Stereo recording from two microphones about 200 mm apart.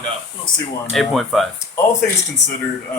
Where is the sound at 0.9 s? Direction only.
Centre (ahead or behind).